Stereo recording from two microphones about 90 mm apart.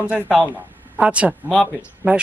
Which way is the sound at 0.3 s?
15° right (ahead or behind).